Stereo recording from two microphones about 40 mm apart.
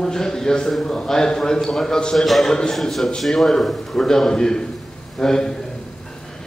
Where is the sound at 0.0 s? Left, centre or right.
Centre.